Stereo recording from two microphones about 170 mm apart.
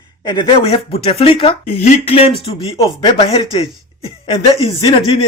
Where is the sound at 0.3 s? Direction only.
30° left (ahead or behind).